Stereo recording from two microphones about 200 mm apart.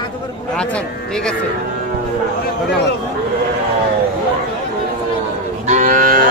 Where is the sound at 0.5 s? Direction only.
5° left (ahead or behind).